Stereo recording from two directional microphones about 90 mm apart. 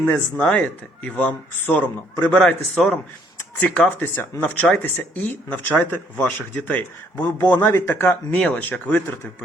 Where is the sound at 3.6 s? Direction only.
15° left (ahead or behind).